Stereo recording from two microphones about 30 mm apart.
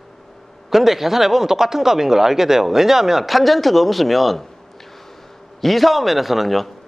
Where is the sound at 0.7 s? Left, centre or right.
Centre.